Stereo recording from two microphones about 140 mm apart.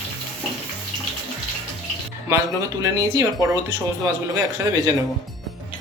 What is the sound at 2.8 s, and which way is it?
Speech, 25° right (ahead or behind).